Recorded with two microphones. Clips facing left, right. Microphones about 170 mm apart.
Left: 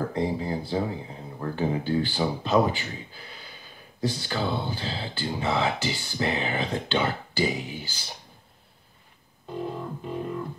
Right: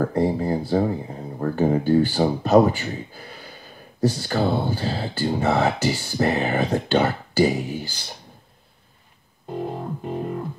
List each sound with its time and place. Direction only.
0.0 s speech: 50° right (ahead or behind)
0.7 s speech: 45° right (ahead or behind)
9.5 s music: 45° right (ahead or behind)